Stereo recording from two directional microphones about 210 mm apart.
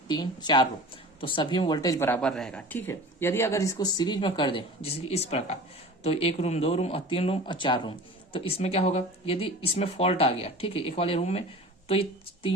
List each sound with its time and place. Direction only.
0.1 s speech: 20° left (ahead or behind)